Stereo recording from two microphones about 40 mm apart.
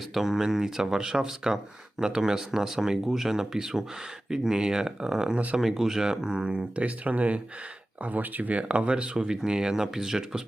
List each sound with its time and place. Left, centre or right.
0.1 s speech: centre; by 7.4 s right
8.0 s speech: right
8.5 s speech: right; by 10.4 s centre